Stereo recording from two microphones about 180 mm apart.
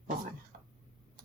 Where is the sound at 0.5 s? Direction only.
55° right (ahead or behind).